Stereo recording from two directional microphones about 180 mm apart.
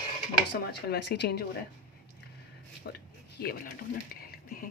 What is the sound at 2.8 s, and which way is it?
Speech, 70° left (ahead or behind).